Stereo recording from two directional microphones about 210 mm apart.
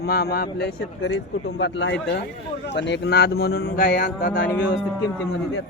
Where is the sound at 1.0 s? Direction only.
60° left (ahead or behind).